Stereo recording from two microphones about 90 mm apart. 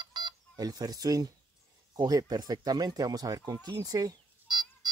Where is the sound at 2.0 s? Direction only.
45° right (ahead or behind).